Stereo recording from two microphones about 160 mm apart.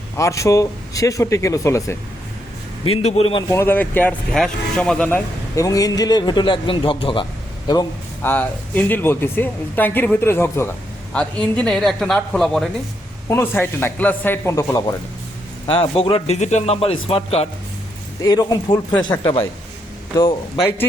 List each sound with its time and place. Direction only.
0.2 s speech: 20° left (ahead or behind)
2.8 s a man's voice: 40° left (ahead or behind)
3.5 s speech: 15° left (ahead or behind); by 7.3 s 30° left (ahead or behind)
8.2 s speech: 10° left (ahead or behind)
11.5 s speech: 5° left (ahead or behind)
13.2 s speech: 15° left (ahead or behind)
15.6 s a man's voice: 35° left (ahead or behind)
18.2 s speech: 25° left (ahead or behind)